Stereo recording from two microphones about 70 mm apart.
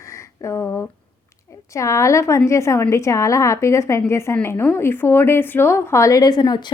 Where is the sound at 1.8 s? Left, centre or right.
Left.